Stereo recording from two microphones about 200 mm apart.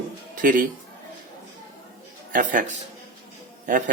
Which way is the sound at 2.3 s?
40° right (ahead or behind).